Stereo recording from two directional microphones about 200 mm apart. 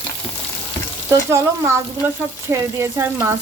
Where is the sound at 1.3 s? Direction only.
15° right (ahead or behind).